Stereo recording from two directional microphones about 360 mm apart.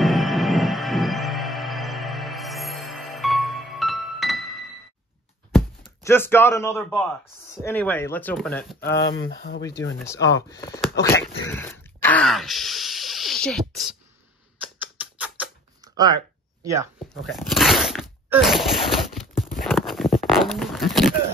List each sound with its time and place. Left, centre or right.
0.0 s music: centre
6.0 s a man's voice: centre
9.4 s speech: left
9.7 s speech: centre
15.0 s a sound: centre